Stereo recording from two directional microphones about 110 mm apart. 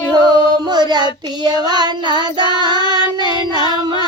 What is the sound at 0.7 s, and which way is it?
Child singing, 40° right (ahead or behind).